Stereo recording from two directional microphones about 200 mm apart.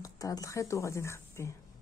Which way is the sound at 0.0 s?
15° left (ahead or behind).